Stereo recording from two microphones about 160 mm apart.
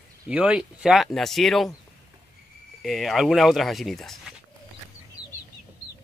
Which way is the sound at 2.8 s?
Centre (ahead or behind).